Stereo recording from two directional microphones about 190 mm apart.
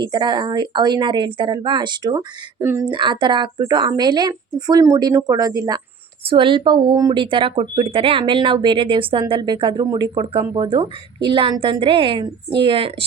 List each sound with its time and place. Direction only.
0.0 s speech: 25° right (ahead or behind)
2.9 s speech: 25° right (ahead or behind)